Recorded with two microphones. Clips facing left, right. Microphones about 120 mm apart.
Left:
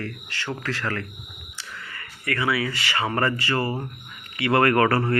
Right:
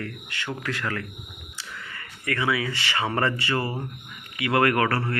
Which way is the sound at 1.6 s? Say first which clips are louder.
Left 1 dB; 20° right (ahead or behind).